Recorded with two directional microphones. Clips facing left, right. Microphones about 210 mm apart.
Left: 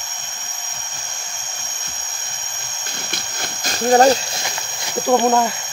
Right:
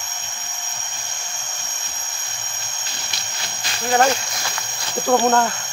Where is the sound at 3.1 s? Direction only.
50° left (ahead or behind).